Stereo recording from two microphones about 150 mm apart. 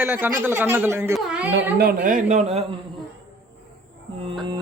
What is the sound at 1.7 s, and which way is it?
Speech, 75° right (ahead or behind).